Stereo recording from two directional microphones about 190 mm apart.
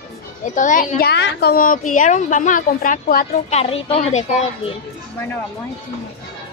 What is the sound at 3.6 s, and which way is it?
A woman's voice, 30° left (ahead or behind).